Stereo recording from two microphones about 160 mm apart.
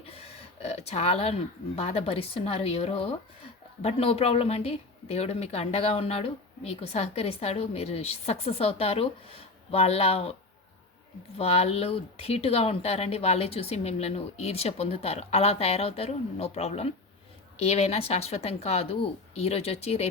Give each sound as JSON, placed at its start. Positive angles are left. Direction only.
{"t": 0.0, "sound": "speech", "side_deg": 40}
{"t": 11.3, "sound": "speech", "side_deg": 40}